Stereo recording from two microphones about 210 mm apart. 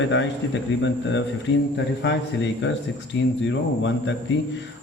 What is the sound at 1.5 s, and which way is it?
A man's voice, 55° left (ahead or behind).